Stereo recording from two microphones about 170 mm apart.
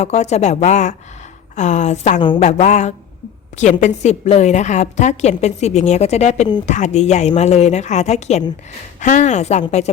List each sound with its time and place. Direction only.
0.0 s a woman's voice: 40° left (ahead or behind)